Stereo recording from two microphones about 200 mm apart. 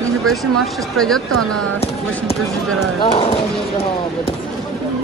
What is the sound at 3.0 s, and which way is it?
Speech, 25° left (ahead or behind).